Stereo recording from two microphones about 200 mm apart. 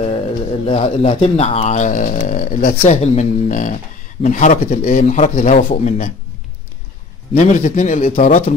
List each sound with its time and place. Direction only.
0.7 s speech: 30° left (ahead or behind); by 2.8 s 45° left (ahead or behind)
2.8 s speech: 35° left (ahead or behind)
7.3 s speech: 40° left (ahead or behind)